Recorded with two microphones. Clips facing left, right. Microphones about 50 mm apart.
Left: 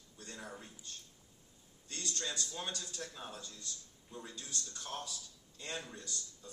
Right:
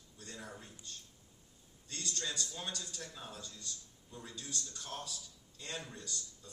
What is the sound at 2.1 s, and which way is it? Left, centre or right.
Speech, centre.